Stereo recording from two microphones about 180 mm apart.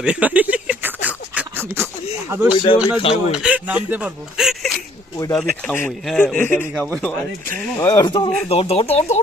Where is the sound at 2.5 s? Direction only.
25° left (ahead or behind).